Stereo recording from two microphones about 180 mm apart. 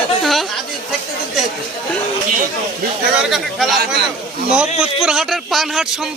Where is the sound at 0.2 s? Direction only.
Centre (ahead or behind).